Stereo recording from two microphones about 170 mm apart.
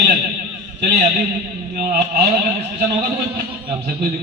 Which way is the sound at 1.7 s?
65° right (ahead or behind).